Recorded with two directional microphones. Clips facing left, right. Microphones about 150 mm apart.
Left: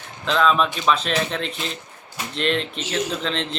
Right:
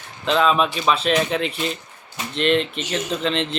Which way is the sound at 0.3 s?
5° right (ahead or behind).